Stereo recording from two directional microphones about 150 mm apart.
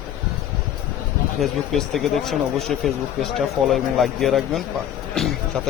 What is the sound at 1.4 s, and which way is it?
Speech, centre (ahead or behind).